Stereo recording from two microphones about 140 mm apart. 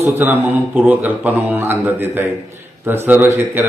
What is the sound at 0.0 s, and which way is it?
Speech, 15° right (ahead or behind).